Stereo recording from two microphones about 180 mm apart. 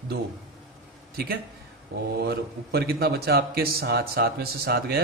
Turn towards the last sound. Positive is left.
turn(degrees=-60)  # may be behind; listen again after turning